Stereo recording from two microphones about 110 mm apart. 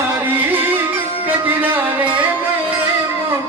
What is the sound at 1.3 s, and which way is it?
Music, 15° right (ahead or behind).